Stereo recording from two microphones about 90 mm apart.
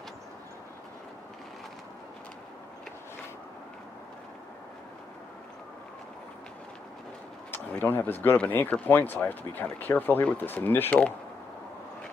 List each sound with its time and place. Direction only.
7.7 s speech: 20° left (ahead or behind)